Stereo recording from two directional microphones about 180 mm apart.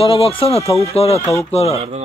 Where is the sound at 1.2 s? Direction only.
15° left (ahead or behind).